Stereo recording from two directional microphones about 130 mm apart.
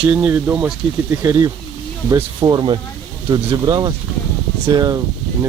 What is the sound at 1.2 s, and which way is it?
Speech, 25° right (ahead or behind).